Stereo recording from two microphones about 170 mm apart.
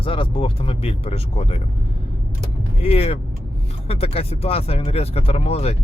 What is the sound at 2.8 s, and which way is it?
Speech, 35° left (ahead or behind).